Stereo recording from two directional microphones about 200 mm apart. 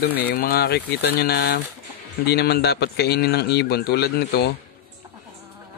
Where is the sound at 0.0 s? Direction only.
55° left (ahead or behind).